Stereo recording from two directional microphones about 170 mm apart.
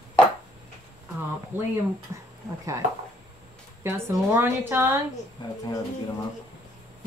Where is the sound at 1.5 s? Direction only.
10° right (ahead or behind).